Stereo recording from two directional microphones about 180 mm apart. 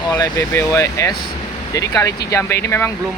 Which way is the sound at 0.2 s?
20° left (ahead or behind).